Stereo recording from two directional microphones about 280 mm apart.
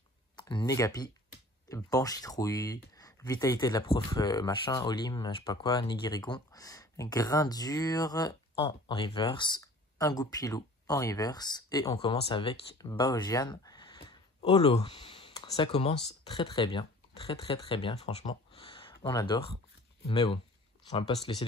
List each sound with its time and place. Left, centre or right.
0.4 s speech: centre